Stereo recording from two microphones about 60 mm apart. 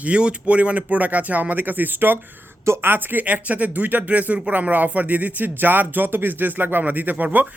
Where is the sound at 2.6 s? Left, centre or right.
Right.